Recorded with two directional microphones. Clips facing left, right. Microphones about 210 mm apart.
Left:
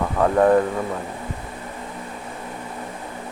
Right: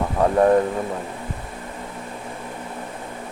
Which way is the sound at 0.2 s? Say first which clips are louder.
Even; 20° right (ahead or behind).